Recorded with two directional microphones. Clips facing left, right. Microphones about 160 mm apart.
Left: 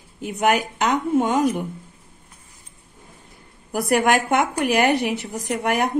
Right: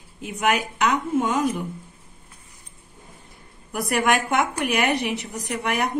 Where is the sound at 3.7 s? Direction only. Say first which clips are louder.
Left 3 dB; 25° left (ahead or behind).